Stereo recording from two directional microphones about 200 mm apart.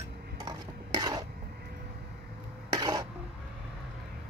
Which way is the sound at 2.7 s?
20° right (ahead or behind).